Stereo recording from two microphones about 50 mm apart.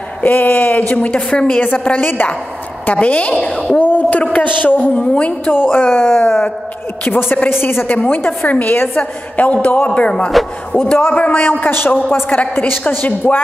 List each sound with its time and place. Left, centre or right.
0.2 s speech: left
2.9 s a woman's voice: left
3.8 s a sound: left
4.2 s a man's voice: left
4.9 s a woman's voice: left
5.5 s a woman's voice: left
7.9 s speech: left
9.4 s a woman's voice: left
11.0 s a woman's voice: left